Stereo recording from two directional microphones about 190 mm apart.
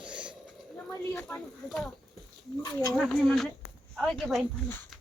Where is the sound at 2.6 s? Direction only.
15° left (ahead or behind).